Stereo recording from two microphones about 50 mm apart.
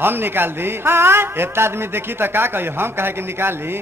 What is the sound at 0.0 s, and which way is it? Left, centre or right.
A man's voice, right.